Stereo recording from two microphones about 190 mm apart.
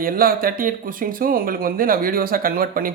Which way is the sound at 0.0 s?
50° right (ahead or behind).